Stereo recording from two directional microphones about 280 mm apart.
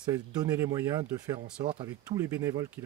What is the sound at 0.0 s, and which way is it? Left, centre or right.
Speech, centre.